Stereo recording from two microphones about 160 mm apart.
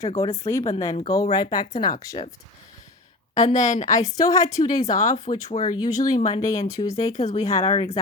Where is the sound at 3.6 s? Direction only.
50° left (ahead or behind).